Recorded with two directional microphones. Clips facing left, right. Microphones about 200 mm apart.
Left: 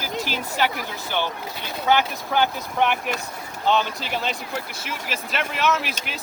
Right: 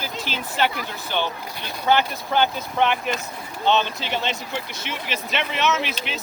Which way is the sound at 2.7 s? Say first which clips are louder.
Right 1 dB; 10° left (ahead or behind).